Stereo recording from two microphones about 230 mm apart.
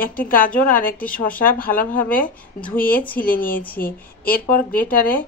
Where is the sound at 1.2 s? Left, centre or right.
Centre.